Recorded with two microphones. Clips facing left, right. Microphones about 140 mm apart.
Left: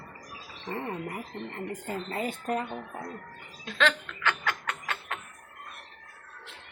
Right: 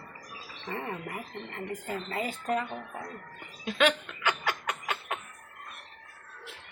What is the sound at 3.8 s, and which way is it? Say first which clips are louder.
Chuckle: right 1 dB; 10° right (ahead or behind).